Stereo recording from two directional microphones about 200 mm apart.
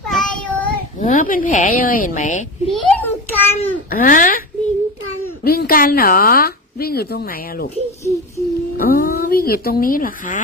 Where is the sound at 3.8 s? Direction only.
45° left (ahead or behind).